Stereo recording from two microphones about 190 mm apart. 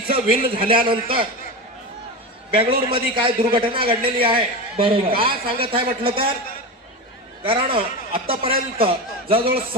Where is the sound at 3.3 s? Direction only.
25° right (ahead or behind).